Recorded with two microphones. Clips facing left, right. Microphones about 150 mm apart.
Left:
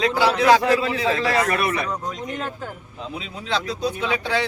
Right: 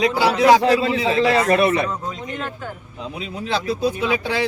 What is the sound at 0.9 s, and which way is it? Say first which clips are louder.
A man's voice: right 4 dB; 20° right (ahead or behind).